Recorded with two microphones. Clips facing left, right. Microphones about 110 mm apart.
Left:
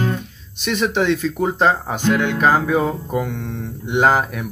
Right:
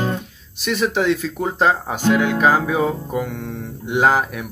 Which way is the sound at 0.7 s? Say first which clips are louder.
Even; 5° right (ahead or behind).